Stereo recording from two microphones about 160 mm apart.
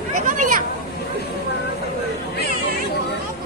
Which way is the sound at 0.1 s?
55° right (ahead or behind).